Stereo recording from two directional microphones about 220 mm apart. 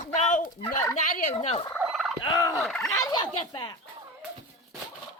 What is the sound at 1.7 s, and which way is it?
Fowl, centre (ahead or behind).